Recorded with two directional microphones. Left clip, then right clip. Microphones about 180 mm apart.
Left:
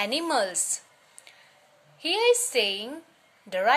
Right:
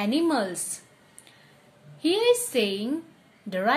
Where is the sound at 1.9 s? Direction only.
20° left (ahead or behind).